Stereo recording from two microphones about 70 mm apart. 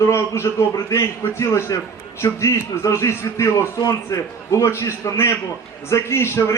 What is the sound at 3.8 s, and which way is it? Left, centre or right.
A man's voice, left.